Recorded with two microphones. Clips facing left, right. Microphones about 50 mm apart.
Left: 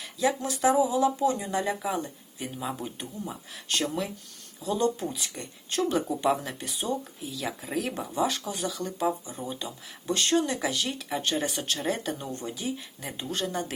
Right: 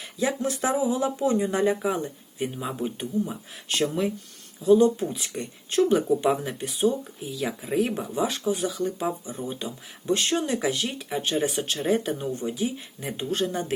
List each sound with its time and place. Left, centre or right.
0.0 s speech: right